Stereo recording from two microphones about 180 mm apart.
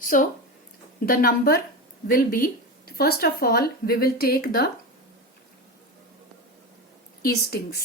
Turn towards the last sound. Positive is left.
turn(degrees=60)  # may be behind; listen again after turning